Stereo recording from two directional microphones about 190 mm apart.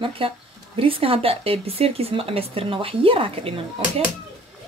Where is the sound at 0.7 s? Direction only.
30° right (ahead or behind).